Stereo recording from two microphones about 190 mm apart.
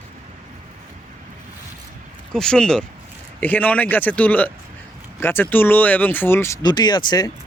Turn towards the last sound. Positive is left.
turn(degrees=20)  # may be behind; listen again after turning